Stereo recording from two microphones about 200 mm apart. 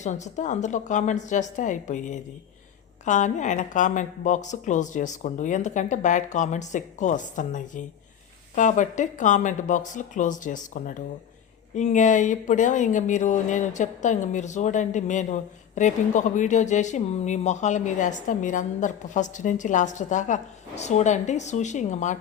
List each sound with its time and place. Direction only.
0.0 s speech: 35° left (ahead or behind)